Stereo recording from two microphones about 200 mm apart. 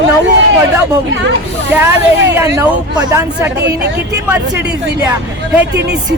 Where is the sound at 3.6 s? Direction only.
55° right (ahead or behind).